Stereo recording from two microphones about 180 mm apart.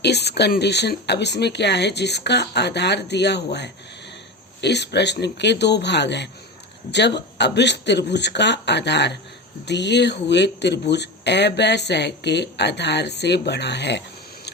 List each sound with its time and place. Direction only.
0.0 s speech: 65° left (ahead or behind)